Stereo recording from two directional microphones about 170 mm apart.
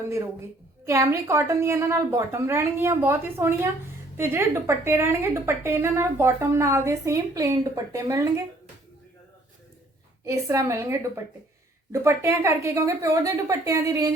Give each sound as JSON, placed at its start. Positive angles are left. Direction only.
{"t": 0.9, "sound": "a woman's voice", "side_deg": -20}
{"t": 10.2, "sound": "a woman's voice", "side_deg": -20}